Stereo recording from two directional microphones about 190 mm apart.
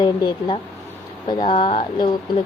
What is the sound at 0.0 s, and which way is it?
A woman's voice, 25° left (ahead or behind).